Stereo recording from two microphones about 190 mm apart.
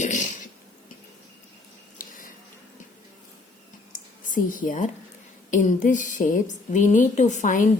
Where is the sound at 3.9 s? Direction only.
45° left (ahead or behind).